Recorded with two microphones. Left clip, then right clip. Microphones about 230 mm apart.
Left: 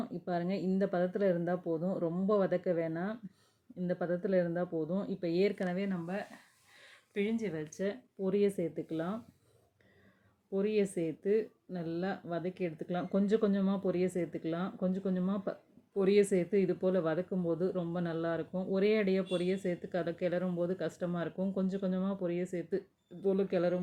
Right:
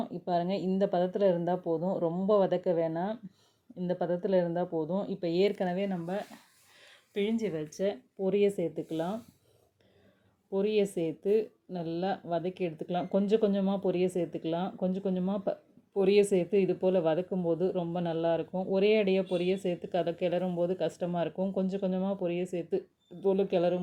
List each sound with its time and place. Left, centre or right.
0.0 s speech: centre
1.6 s speech: right
2.0 s speech: centre
4.7 s speech: right
5.2 s speech: centre
10.5 s speech: centre